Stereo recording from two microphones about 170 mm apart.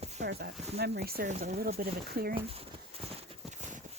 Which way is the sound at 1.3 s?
50° right (ahead or behind).